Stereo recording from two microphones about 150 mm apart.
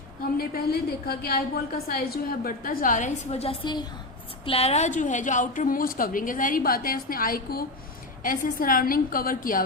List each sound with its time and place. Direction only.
0.3 s a woman's voice: 85° left; by 3.1 s 60° left (ahead or behind)
3.3 s a woman's voice: 40° left (ahead or behind); by 9.6 s 65° left (ahead or behind)